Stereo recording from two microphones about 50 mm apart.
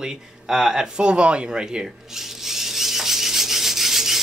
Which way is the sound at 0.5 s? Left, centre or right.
Centre.